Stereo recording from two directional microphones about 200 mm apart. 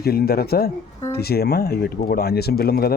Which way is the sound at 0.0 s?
50° left (ahead or behind).